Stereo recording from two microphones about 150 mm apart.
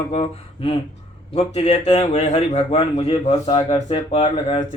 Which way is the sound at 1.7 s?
50° left (ahead or behind).